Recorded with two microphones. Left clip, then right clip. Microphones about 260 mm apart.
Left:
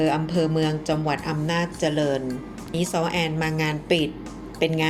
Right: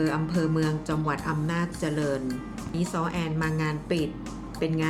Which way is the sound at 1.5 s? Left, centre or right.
Right.